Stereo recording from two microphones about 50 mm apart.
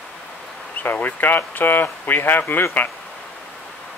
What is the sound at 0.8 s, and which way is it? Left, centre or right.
Speech, left.